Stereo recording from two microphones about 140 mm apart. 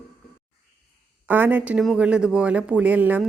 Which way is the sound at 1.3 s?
15° right (ahead or behind).